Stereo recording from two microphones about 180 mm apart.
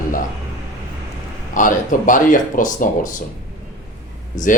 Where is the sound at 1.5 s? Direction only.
45° left (ahead or behind).